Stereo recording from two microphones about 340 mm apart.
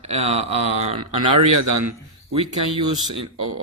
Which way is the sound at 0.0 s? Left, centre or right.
Centre.